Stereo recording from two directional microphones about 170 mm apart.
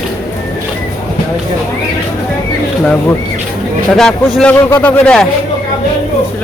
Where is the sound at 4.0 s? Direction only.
5° left (ahead or behind).